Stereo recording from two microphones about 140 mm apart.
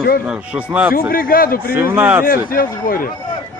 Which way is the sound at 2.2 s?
90° left.